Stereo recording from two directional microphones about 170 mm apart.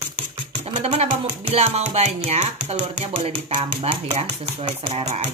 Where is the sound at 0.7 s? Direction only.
30° right (ahead or behind).